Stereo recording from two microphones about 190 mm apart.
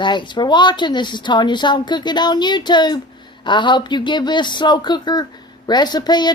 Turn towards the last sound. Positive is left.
turn(degrees=20)  # may be behind; listen again after turning